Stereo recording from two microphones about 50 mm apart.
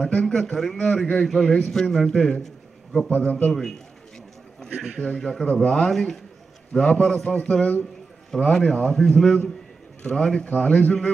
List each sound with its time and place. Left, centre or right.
0.0 s a man's voice: centre
3.3 s a man's voice: left
4.9 s a man's voice: centre
8.3 s a man's voice: centre